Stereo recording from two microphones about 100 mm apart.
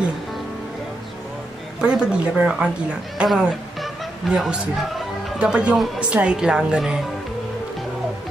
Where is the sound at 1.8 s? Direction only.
10° right (ahead or behind).